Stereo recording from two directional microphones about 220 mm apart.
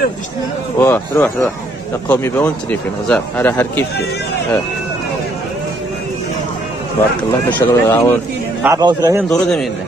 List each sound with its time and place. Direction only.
0.7 s speech: 10° left (ahead or behind)
7.5 s speech: 10° left (ahead or behind)
8.6 s a man's voice: 15° right (ahead or behind)
9.3 s a man's voice: centre (ahead or behind)